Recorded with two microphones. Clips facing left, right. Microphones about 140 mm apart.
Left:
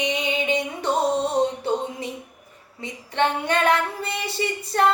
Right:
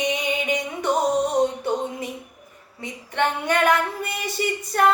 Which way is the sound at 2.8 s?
25° left (ahead or behind).